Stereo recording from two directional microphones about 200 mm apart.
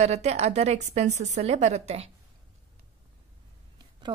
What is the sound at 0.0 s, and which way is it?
A woman's voice, 35° right (ahead or behind).